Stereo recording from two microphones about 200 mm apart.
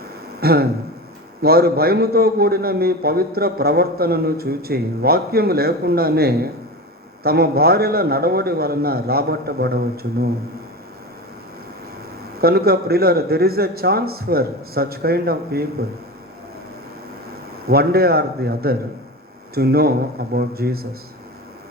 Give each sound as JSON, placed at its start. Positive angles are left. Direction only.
{"t": 0.3, "sound": "a sound", "side_deg": -50}
{"t": 1.4, "sound": "a man's voice", "side_deg": -50}
{"t": 12.4, "sound": "a man's voice", "side_deg": -50}
{"t": 17.7, "sound": "a man's voice", "side_deg": -50}